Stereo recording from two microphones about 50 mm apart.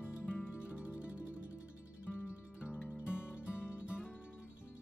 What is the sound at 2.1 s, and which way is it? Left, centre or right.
Music, left.